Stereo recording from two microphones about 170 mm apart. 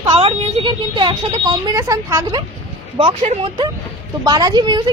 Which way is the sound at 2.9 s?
35° right (ahead or behind).